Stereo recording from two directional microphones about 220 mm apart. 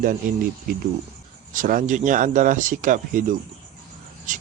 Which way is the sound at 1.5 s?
35° right (ahead or behind).